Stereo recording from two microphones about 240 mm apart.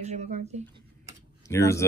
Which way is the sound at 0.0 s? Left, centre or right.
Right.